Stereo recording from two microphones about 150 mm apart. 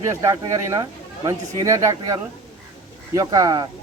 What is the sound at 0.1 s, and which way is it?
Speech, 20° right (ahead or behind).